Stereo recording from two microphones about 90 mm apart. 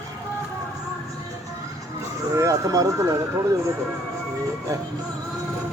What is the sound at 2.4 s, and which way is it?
Speech, 40° right (ahead or behind).